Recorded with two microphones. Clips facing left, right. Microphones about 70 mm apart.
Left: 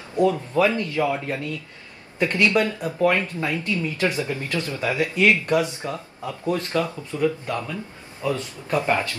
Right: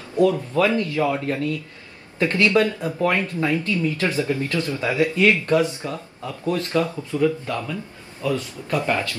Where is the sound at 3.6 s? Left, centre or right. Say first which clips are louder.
Right 1 dB; left.